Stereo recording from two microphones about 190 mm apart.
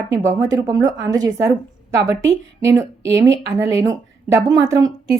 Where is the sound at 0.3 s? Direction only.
15° right (ahead or behind).